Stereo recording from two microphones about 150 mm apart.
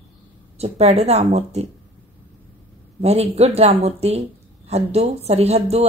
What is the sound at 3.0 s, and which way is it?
Speech, 45° right (ahead or behind).